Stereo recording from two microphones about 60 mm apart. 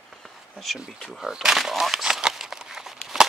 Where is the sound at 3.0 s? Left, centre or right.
Centre.